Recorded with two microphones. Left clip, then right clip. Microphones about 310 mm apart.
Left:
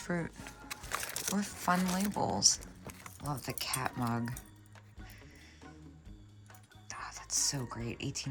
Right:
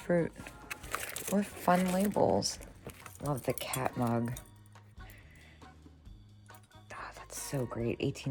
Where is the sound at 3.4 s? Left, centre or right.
Centre.